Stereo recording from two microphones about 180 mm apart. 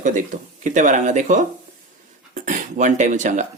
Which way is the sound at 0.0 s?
45° right (ahead or behind).